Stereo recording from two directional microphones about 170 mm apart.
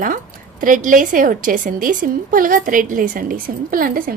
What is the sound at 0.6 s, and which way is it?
A woman's voice, 50° right (ahead or behind).